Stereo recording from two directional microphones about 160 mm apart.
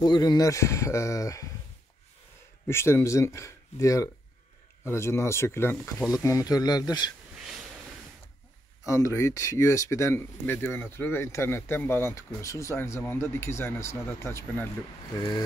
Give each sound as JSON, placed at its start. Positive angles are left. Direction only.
{"t": 0.0, "sound": "speech", "side_deg": 25}
{"t": 2.6, "sound": "speech", "side_deg": 15}
{"t": 8.8, "sound": "speech", "side_deg": 20}